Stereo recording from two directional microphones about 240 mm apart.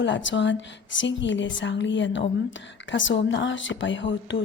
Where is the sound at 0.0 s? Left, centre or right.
Left.